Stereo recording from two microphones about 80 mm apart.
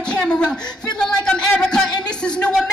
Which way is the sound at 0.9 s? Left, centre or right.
Centre.